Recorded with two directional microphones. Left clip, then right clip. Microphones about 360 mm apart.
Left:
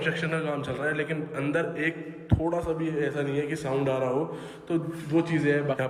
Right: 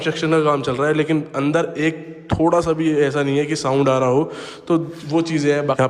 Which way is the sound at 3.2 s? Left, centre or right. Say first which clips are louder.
Right 10 dB; centre.